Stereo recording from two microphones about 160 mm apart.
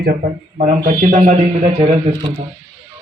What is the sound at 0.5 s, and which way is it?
Speech, 45° right (ahead or behind).